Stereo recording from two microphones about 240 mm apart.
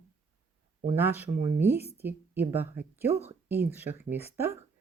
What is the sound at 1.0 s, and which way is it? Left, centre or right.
Speech, centre.